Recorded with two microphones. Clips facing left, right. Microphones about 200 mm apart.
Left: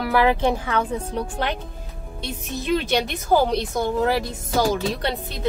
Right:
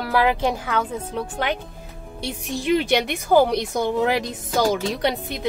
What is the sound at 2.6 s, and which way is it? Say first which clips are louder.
Speech: right 2 dB; 15° right (ahead or behind).